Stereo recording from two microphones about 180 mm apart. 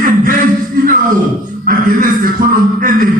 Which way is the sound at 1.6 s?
50° right (ahead or behind).